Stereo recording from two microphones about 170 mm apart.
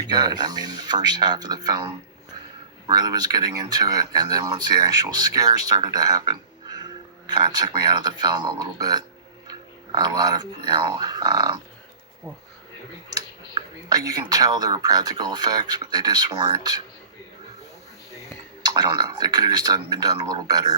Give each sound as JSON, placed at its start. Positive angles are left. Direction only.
{"t": 0.0, "sound": "speech", "side_deg": -25}
{"t": 9.5, "sound": "a sound", "side_deg": -25}
{"t": 10.7, "sound": "speech", "side_deg": -25}
{"t": 13.5, "sound": "speech", "side_deg": -20}
{"t": 18.6, "sound": "speech", "side_deg": -25}